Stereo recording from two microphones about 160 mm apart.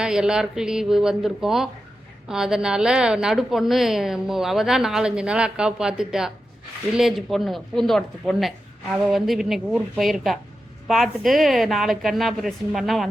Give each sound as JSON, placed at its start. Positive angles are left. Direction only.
{"t": 0.0, "sound": "a woman's voice", "side_deg": -5}